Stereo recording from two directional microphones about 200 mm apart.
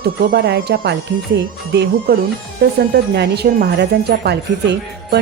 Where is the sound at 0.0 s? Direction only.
55° right (ahead or behind).